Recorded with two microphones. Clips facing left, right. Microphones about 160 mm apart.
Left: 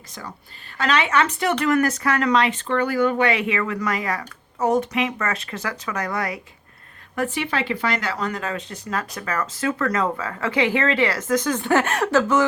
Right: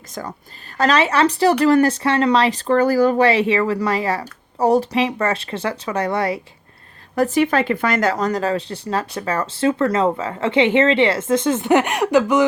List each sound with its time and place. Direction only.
0.2 s a woman's voice: 50° right (ahead or behind)
0.8 s speech: 35° right (ahead or behind)
7.2 s speech: 40° right (ahead or behind); by 12.5 s 15° right (ahead or behind)